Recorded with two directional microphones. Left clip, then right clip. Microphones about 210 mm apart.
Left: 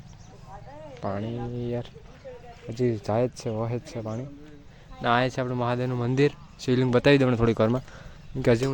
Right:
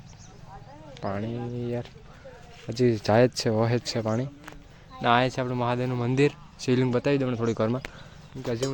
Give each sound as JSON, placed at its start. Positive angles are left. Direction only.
{"t": 1.0, "sound": "speech", "side_deg": -5}
{"t": 2.6, "sound": "speech", "side_deg": -15}
{"t": 4.9, "sound": "speech", "side_deg": -5}
{"t": 6.9, "sound": "speech", "side_deg": 15}